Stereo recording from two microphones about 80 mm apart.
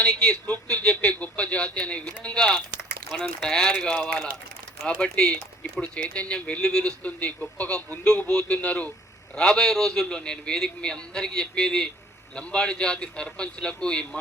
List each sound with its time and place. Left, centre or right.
0.0 s a man's voice: centre